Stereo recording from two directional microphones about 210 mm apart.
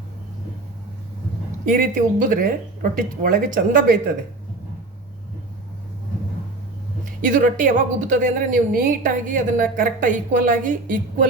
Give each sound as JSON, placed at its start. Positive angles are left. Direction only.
{"t": 1.6, "sound": "a woman's voice", "side_deg": -40}
{"t": 7.2, "sound": "a woman's voice", "side_deg": -40}